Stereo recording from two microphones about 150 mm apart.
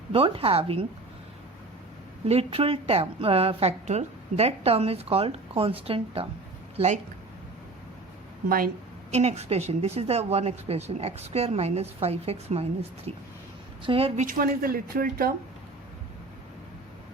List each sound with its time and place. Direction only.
0.1 s a woman's voice: 40° right (ahead or behind)
2.2 s a woman's voice: 40° right (ahead or behind)
6.7 s speech: 50° right (ahead or behind)
8.4 s speech: 75° right (ahead or behind)
9.1 s a woman's voice: 45° right (ahead or behind)
14.3 s speech: 75° right (ahead or behind)